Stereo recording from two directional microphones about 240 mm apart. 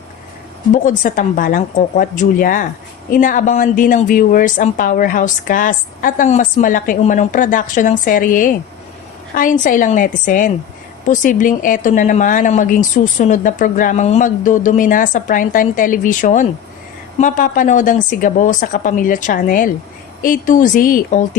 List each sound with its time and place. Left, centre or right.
0.7 s a woman's voice: left